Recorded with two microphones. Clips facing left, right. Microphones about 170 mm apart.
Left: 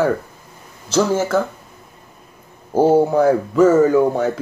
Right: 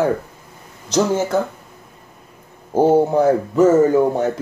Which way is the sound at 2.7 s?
20° right (ahead or behind).